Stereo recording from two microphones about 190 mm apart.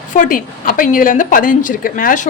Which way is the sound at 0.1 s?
45° left (ahead or behind).